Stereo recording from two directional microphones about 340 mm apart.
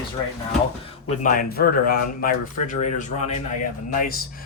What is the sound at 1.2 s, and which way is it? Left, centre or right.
Speech, left.